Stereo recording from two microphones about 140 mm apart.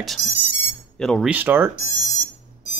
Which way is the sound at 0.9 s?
5° left (ahead or behind).